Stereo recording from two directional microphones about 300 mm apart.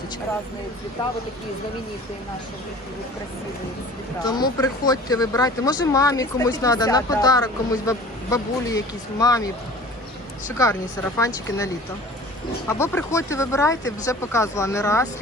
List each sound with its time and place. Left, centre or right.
1.0 s speech: centre
4.2 s speech: centre
11.4 s speech: centre